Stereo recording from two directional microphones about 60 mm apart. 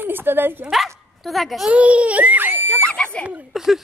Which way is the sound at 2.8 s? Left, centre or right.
Centre.